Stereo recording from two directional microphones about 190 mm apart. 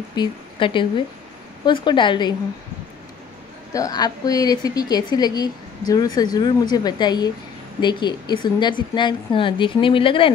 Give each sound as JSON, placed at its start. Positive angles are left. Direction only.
{"t": 0.1, "sound": "speech", "side_deg": 25}
{"t": 3.7, "sound": "speech", "side_deg": 20}